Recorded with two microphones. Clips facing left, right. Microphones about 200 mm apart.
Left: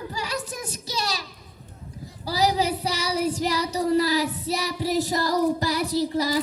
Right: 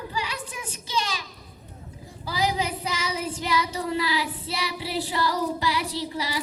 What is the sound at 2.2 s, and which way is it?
Child singing, 40° left (ahead or behind).